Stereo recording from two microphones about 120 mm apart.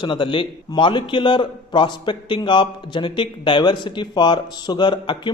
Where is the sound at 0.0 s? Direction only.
45° left (ahead or behind).